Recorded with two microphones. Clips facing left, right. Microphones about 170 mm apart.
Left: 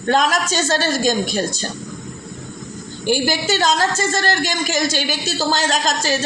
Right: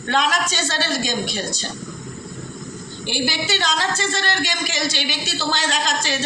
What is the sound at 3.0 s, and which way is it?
A woman's voice, 45° left (ahead or behind).